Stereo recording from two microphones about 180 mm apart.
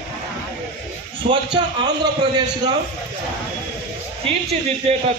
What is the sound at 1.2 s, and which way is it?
Speech, 35° right (ahead or behind).